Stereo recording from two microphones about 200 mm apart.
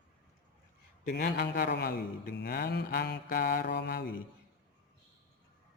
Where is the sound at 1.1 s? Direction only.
50° left (ahead or behind).